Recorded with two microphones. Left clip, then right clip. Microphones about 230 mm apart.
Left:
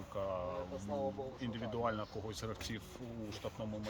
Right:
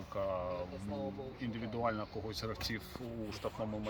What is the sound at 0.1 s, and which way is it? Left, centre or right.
Speech, centre.